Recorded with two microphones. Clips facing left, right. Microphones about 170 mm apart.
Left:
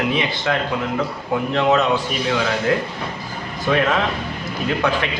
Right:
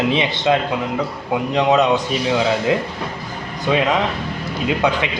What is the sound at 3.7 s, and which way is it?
Speech, 15° right (ahead or behind).